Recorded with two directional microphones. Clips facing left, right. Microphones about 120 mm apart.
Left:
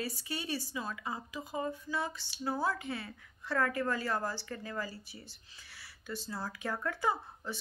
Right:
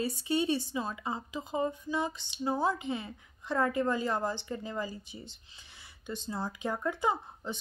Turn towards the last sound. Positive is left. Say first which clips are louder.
# right 2 dB
turn(degrees=-20)  # may be behind; listen again after turning